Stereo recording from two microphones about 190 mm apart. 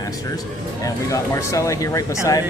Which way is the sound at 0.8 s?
15° left (ahead or behind).